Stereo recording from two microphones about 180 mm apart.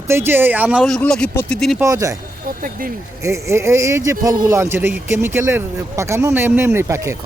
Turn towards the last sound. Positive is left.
turn(degrees=-15)  # may be behind; listen again after turning